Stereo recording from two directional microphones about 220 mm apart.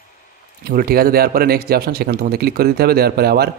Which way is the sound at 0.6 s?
45° right (ahead or behind).